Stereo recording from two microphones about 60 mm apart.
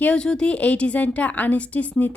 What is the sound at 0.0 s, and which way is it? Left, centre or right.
A woman's voice, centre.